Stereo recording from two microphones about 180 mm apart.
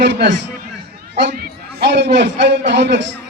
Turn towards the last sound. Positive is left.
turn(degrees=-75)  # may be behind; listen again after turning